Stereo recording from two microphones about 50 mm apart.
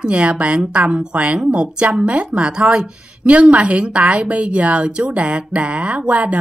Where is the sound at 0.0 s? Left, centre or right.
Right.